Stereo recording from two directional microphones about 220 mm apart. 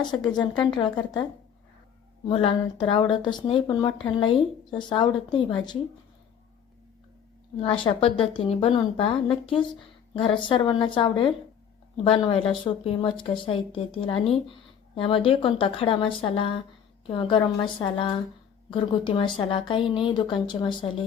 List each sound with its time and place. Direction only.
0.0 s speech: 20° left (ahead or behind)
2.3 s speech: 25° left (ahead or behind)
7.6 s speech: 25° left (ahead or behind)